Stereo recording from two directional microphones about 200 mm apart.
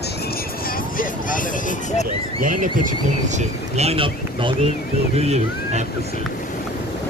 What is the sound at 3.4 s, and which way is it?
Speech, 30° right (ahead or behind).